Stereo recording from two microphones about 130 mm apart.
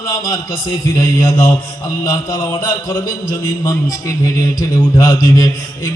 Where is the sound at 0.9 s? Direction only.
20° left (ahead or behind).